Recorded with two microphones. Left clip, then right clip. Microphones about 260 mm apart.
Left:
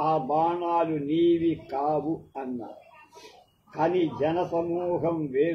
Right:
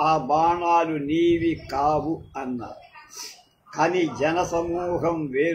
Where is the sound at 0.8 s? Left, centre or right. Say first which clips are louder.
Right 2 dB; right.